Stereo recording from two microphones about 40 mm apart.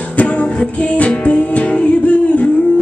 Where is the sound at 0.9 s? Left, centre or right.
Left.